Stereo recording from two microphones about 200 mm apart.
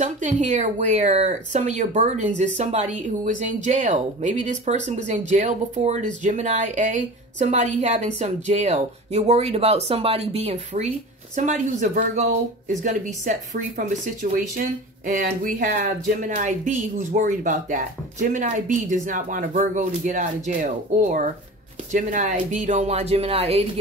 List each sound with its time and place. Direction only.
0.0 s speech: 40° right (ahead or behind)